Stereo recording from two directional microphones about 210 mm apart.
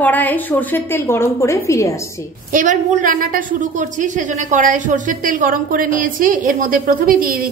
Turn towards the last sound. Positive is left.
turn(degrees=-40)  # may be behind; listen again after turning